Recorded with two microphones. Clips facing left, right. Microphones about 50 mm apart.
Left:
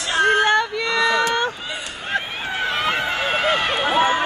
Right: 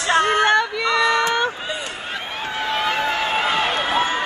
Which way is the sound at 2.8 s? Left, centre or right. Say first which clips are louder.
Right 1 dB; centre.